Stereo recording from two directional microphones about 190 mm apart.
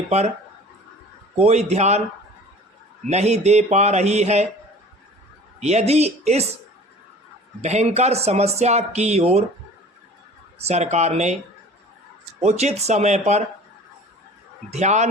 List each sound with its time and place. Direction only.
1.4 s speech: 35° right (ahead or behind)
3.1 s speech: 35° right (ahead or behind)
5.5 s speech: 35° right (ahead or behind)
7.6 s speech: 35° right (ahead or behind)
10.6 s speech: 35° right (ahead or behind)
12.4 s speech: 35° right (ahead or behind)
14.7 s speech: 35° right (ahead or behind)